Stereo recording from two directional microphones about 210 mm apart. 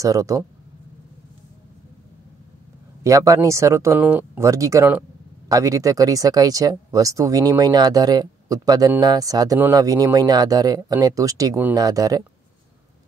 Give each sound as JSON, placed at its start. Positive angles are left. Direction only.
{"t": 0.0, "sound": "speech", "side_deg": -15}
{"t": 3.0, "sound": "speech", "side_deg": -15}